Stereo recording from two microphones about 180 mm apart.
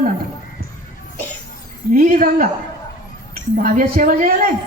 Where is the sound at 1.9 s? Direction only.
50° right (ahead or behind).